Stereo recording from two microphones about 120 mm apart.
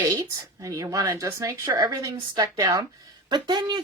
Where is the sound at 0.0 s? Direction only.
30° right (ahead or behind).